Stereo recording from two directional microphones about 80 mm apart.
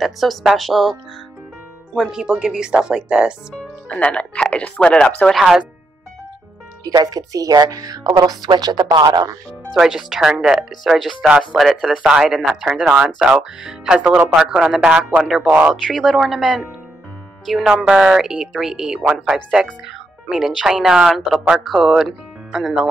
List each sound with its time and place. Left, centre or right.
0.0 s speech: centre
2.0 s speech: centre
3.9 s speech: centre
6.8 s speech: right
9.7 s speech: centre; by 15.7 s right
15.7 s speech: centre
17.8 s speech: centre